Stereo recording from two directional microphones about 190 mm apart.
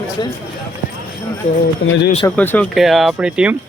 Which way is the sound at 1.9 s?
70° left (ahead or behind).